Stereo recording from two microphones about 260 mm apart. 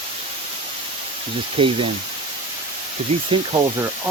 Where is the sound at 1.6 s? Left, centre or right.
Right.